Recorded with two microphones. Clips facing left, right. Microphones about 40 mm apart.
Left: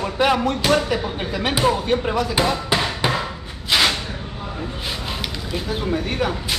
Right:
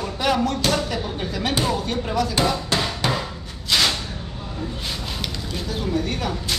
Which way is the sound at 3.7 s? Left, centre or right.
Centre.